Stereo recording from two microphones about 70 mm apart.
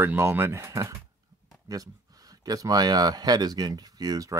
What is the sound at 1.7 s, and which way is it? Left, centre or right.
Speech, right.